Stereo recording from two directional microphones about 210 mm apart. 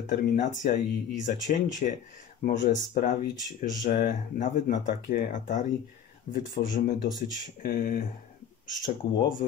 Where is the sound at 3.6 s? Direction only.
40° left (ahead or behind).